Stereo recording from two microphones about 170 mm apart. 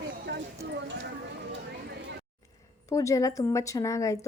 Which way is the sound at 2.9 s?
20° left (ahead or behind).